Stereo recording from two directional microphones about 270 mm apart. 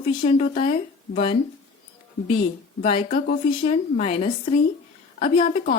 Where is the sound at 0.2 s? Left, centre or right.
Left.